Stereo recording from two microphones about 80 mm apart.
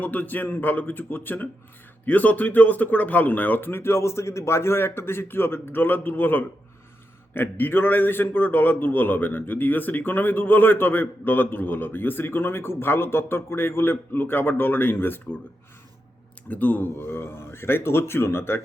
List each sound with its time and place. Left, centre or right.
0.0 s a man's voice: left
16.5 s a man's voice: left